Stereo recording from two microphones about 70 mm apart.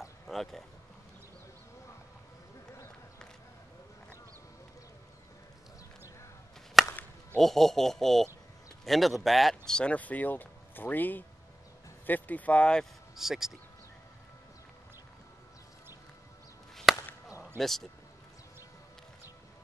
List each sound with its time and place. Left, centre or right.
0.3 s speech: centre
6.8 s chop: centre
7.3 s speech: centre
13.1 s speech: centre
16.9 s chop: centre
17.6 s speech: centre